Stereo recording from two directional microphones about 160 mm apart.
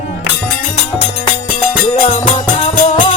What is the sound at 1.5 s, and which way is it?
Music, 50° left (ahead or behind).